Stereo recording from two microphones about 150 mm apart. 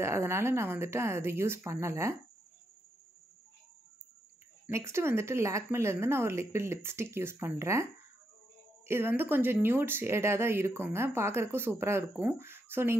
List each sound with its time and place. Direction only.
0.0 s speech: 20° right (ahead or behind)
4.6 s speech: 20° right (ahead or behind)